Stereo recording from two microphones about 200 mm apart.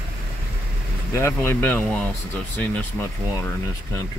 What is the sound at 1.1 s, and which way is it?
Speech, 15° left (ahead or behind).